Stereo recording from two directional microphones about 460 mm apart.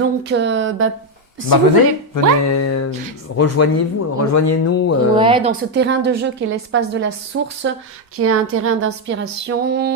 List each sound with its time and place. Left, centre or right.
0.3 s a woman's voice: right
2.1 s speech: left
5.1 s a woman's voice: centre